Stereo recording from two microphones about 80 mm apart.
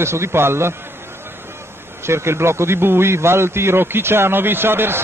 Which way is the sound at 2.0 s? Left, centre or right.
Right.